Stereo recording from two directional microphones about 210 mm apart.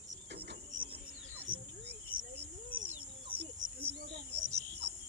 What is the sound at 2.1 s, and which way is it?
Cricket, 45° right (ahead or behind).